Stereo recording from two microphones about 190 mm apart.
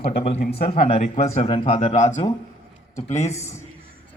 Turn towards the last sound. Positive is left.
turn(degrees=15)  # may be behind; listen again after turning